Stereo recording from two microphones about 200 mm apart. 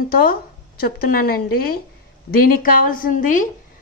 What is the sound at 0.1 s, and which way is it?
A woman's voice, 45° left (ahead or behind).